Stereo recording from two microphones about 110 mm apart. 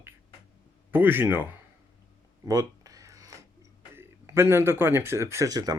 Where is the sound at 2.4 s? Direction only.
35° right (ahead or behind).